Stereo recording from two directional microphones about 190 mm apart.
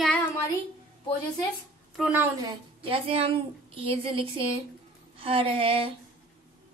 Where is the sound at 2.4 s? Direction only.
30° right (ahead or behind).